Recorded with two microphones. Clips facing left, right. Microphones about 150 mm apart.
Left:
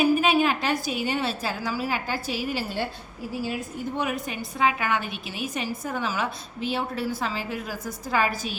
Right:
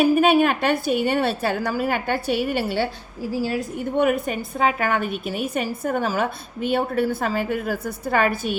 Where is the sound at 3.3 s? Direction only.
90° right.